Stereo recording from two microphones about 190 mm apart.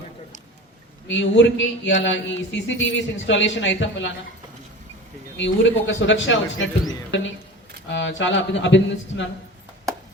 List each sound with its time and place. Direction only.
1.0 s a man's voice: 75° left (ahead or behind)
5.4 s a man's voice: 70° left (ahead or behind)